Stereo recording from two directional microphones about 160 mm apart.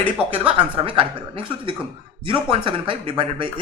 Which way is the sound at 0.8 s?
35° right (ahead or behind).